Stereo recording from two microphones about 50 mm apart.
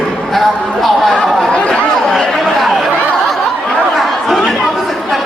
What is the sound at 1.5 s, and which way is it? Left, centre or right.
Speech, left.